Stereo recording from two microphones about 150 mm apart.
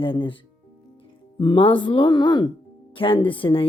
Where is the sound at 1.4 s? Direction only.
35° left (ahead or behind).